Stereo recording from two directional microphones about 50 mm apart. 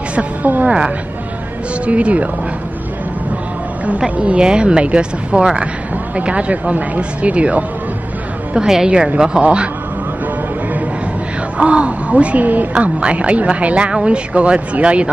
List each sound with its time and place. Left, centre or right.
0.1 s a woman's voice: right
0.7 s speech: centre
4.0 s speech: centre
8.5 s a woman's voice: centre
11.5 s speech: right